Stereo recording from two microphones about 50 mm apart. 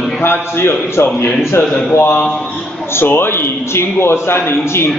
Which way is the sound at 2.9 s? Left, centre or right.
Left.